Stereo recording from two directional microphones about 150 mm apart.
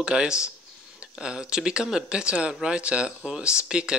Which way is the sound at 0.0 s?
5° right (ahead or behind).